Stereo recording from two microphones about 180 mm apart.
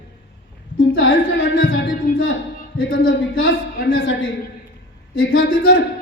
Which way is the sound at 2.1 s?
50° left (ahead or behind).